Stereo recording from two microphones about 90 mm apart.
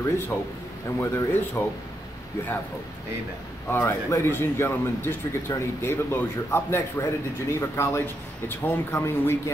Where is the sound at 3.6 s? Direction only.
25° left (ahead or behind).